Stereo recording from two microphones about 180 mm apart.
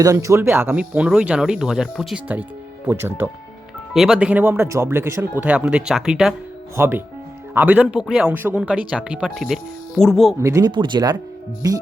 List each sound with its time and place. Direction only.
0.0 s speech: 20° right (ahead or behind)
3.9 s speech: centre (ahead or behind)
6.7 s speech: 15° right (ahead or behind)
10.4 s speech: 20° right (ahead or behind)